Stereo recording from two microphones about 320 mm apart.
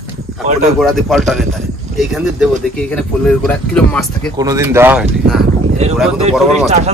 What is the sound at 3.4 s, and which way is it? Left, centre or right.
Speech, centre.